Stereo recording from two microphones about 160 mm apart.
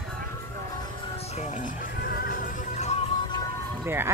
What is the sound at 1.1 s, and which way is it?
Music, 45° left (ahead or behind).